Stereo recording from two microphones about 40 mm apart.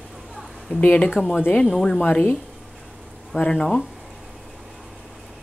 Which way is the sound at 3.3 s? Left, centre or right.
Left.